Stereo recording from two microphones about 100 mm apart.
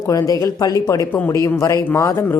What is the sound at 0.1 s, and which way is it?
A woman's voice, 35° left (ahead or behind).